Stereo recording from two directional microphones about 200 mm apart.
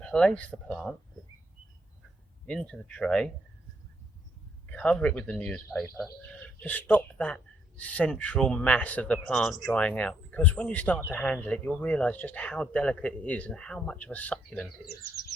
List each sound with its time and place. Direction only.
0.0 s speech: 5° left (ahead or behind)
2.5 s speech: 5° left (ahead or behind)
4.7 s speech: 5° left (ahead or behind)